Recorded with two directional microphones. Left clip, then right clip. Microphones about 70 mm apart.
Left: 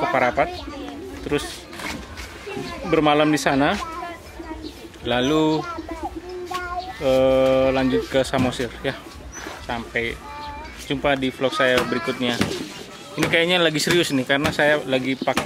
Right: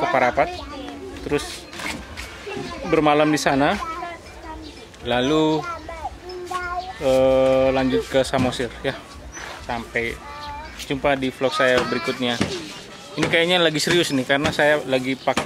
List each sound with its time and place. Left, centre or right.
0.0 s speech: centre
2.4 s a sound: centre
2.8 s speech: centre
7.0 s speech: centre
9.4 s dog: centre
10.9 s speech: centre
11.9 s speech: right
12.4 s speech: left
13.3 s speech: centre